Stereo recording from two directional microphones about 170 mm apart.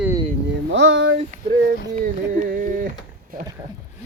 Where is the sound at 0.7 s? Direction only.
90° right.